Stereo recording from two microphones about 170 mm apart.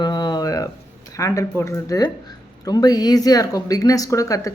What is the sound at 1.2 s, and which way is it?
Speech, 20° left (ahead or behind).